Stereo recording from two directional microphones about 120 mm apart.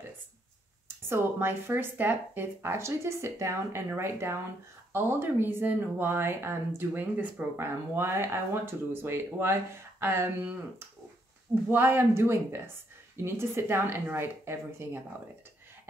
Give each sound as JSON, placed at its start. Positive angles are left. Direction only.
{"t": 0.8, "sound": "speech", "side_deg": -20}
{"t": 11.7, "sound": "speech", "side_deg": -20}